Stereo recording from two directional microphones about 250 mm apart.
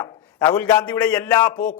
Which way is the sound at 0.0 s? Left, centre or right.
Centre.